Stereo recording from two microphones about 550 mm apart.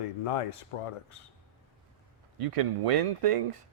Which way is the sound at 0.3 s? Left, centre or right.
Left.